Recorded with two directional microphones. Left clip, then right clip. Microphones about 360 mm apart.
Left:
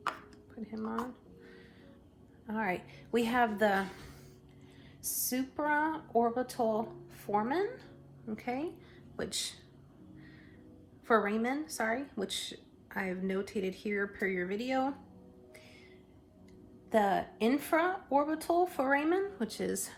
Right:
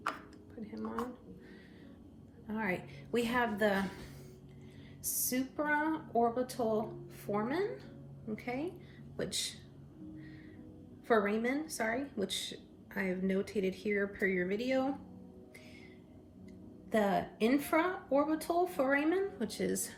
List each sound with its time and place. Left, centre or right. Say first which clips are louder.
0.6 s speech: left 2 dB; centre
2.5 s a woman's voice: left 2 dB; centre
5.0 s a woman's voice: even; centre
11.1 s a woman's voice: left 1 dB; centre
16.9 s a woman's voice: left 3 dB; centre